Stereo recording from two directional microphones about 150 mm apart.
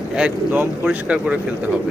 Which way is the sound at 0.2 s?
10° right (ahead or behind).